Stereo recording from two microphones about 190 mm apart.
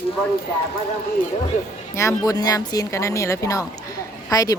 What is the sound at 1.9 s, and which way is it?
Speech, 15° left (ahead or behind).